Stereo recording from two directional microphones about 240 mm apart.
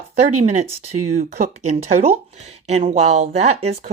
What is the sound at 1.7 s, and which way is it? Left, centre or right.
Speech, right.